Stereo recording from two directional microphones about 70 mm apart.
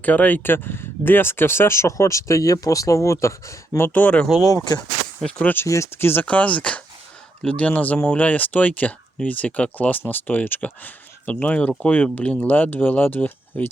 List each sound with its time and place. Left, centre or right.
0.0 s speech: left
3.9 s speech: centre
4.4 s speech: left
5.6 s speech: left
6.2 s speech: centre